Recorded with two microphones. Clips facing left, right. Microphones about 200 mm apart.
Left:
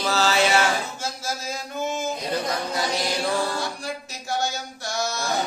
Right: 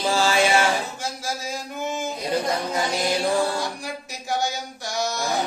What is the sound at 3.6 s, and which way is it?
Music, 15° right (ahead or behind).